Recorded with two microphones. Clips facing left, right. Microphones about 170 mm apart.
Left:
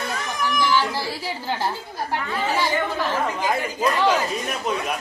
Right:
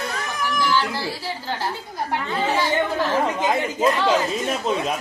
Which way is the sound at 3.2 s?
20° right (ahead or behind).